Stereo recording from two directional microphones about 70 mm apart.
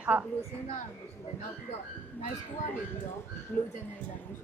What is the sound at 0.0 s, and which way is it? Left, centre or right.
Speech, right.